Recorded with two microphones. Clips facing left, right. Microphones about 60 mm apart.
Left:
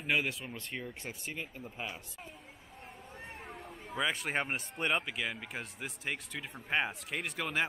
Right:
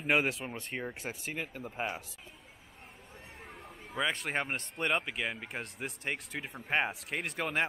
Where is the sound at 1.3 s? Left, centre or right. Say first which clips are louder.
Right 3 dB; right.